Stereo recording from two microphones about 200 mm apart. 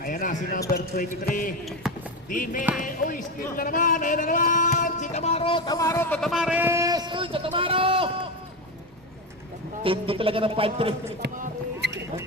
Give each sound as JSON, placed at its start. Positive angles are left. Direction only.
{"t": 0.0, "sound": "speech", "side_deg": 40}
{"t": 1.8, "sound": "basketball bounce", "side_deg": 0}
{"t": 2.3, "sound": "speech", "side_deg": 45}
{"t": 6.1, "sound": "speech", "side_deg": 0}
{"t": 9.8, "sound": "speech", "side_deg": -25}
{"t": 11.2, "sound": "a sound", "side_deg": -55}